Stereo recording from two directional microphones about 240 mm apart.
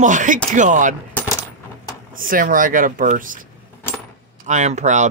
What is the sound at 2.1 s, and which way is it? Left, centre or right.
Speech, right.